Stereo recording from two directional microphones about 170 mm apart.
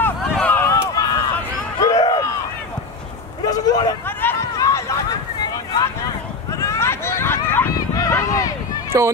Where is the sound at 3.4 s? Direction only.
20° left (ahead or behind).